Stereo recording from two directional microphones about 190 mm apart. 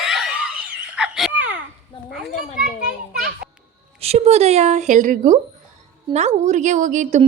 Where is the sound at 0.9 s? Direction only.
5° right (ahead or behind).